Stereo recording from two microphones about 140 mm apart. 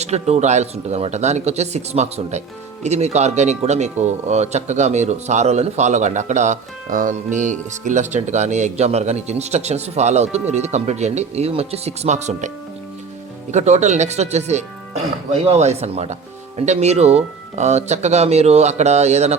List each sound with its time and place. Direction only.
0.0 s speech: 50° right (ahead or behind)
13.5 s speech: 55° right (ahead or behind)